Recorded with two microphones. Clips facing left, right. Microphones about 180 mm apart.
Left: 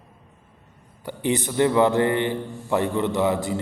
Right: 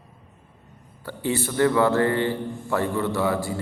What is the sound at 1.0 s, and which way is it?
A man's voice, 20° left (ahead or behind).